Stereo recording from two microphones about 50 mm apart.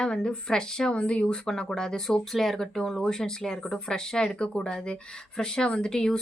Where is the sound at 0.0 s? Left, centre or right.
Centre.